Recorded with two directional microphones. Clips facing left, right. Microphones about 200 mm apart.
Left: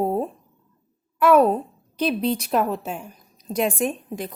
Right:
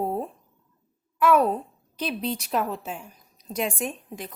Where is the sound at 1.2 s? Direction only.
60° left (ahead or behind).